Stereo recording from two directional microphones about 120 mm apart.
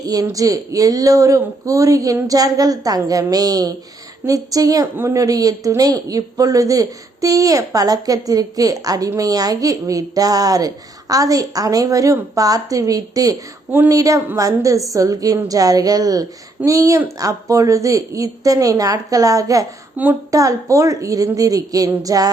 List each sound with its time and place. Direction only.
0.0 s a woman's voice: 30° right (ahead or behind)
13.7 s speech: 15° right (ahead or behind)
13.9 s a woman's voice: 30° right (ahead or behind)
20.0 s speech: 15° right (ahead or behind)
20.3 s speech: 30° right (ahead or behind)